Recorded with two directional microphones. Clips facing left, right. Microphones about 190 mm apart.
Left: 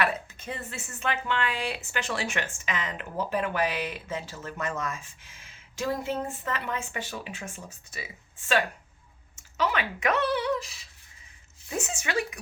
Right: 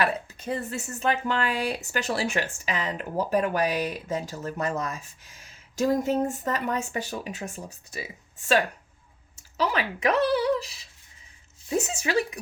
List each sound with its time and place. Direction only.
0.0 s speech: 35° right (ahead or behind)
11.7 s speech: 35° right (ahead or behind)